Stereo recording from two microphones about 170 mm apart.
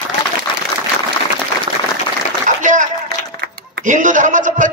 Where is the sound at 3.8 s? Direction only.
50° right (ahead or behind).